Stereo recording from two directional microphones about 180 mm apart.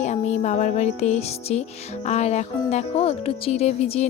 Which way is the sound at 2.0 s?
40° left (ahead or behind).